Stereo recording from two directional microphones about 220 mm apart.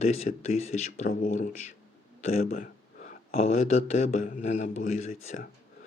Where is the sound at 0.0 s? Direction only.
30° left (ahead or behind).